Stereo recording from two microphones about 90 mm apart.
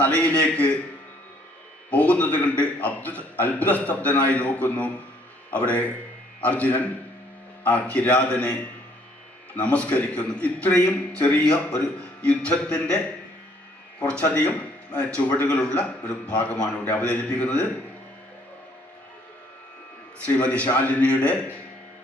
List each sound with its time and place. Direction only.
0.0 s a man's voice: 15° left (ahead or behind)
1.9 s a man's voice: 15° left (ahead or behind)
9.6 s a man's voice: 15° left (ahead or behind)
14.0 s a man's voice: 15° left (ahead or behind)
20.2 s a man's voice: 15° left (ahead or behind)